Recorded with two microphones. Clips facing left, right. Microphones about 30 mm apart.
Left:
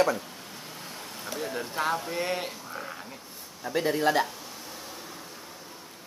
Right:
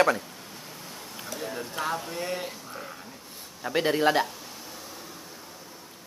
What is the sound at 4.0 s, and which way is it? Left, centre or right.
Speech, centre.